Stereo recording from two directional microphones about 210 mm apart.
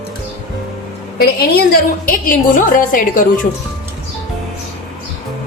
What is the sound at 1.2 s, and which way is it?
A woman's voice, 50° left (ahead or behind).